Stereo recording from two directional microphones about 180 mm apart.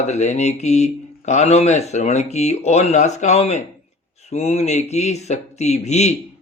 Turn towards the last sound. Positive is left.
turn(degrees=40)  # may be behind; listen again after turning